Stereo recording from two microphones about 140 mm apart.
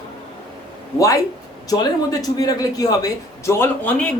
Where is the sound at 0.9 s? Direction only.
25° left (ahead or behind).